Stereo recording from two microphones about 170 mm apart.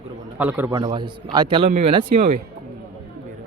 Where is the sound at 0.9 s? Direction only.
25° right (ahead or behind).